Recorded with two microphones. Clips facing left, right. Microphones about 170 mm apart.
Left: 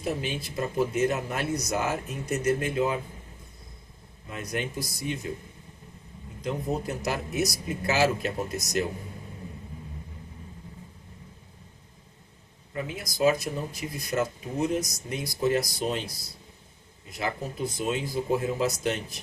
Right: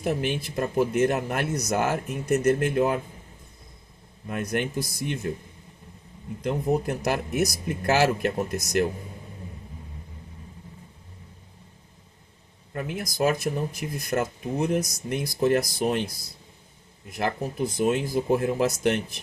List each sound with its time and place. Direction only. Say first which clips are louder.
0.0 s speech: right 4 dB; 60° right (ahead or behind)
4.3 s speech: right 5 dB; 60° right (ahead or behind)
6.4 s speech: right 5 dB; 55° right (ahead or behind)
12.7 s speech: right 3 dB; 55° right (ahead or behind)
17.1 s speech: right 4 dB; 55° right (ahead or behind)